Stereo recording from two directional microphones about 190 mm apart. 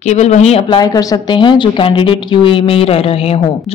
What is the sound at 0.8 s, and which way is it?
A woman's voice, 20° left (ahead or behind).